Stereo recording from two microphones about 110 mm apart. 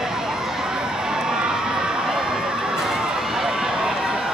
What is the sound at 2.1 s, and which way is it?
Run, 5° right (ahead or behind).